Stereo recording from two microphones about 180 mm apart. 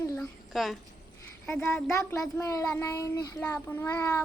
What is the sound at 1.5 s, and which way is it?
Speech, 15° left (ahead or behind).